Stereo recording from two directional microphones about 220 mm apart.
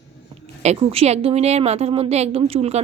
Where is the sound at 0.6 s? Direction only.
30° right (ahead or behind).